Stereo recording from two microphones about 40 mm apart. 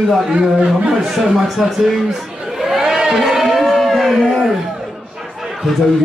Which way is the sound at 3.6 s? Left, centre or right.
Centre.